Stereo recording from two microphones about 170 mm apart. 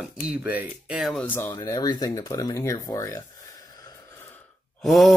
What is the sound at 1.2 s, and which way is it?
Speech, 10° left (ahead or behind).